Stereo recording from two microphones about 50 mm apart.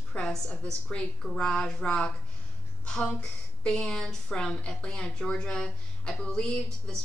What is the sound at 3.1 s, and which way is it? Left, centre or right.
A woman's voice, centre.